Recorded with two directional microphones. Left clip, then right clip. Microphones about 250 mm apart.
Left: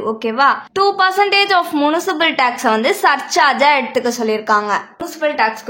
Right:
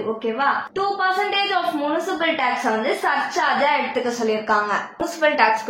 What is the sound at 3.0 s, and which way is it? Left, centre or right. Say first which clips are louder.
A woman's voice: left 8 dB; left.